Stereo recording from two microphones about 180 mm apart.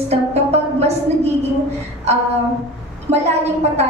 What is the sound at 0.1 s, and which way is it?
Music, 35° right (ahead or behind).